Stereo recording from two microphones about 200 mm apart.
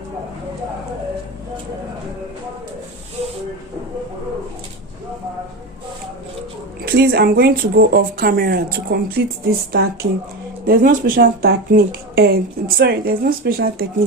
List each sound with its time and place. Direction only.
6.8 s speech: 55° right (ahead or behind)